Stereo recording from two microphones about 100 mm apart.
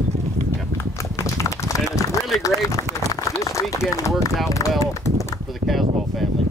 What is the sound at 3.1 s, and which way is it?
Speech, 30° left (ahead or behind).